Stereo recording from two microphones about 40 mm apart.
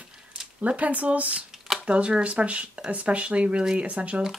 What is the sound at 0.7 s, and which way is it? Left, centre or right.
Speech, right.